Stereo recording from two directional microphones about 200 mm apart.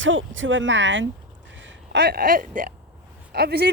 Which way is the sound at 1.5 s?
65° right (ahead or behind).